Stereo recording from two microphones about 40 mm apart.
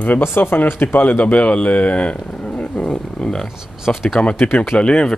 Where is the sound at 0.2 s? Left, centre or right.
Left.